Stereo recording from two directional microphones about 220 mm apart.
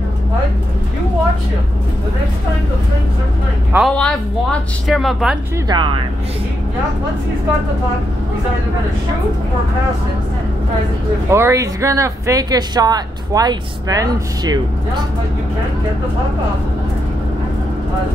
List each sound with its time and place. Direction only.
3.7 s speech: centre (ahead or behind)
5.7 s speech: 20° right (ahead or behind)
11.2 s speech: 10° right (ahead or behind)